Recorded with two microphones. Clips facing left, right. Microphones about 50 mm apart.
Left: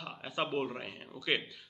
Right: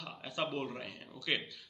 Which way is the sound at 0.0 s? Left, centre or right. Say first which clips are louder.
Left 2 dB; centre.